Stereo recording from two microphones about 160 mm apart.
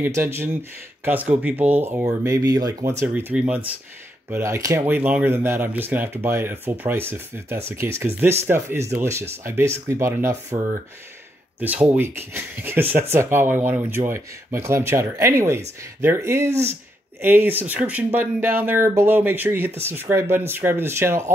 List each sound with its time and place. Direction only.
0.0 s speech: 15° right (ahead or behind)
4.3 s speech: 20° right (ahead or behind)
11.6 s speech: 10° right (ahead or behind)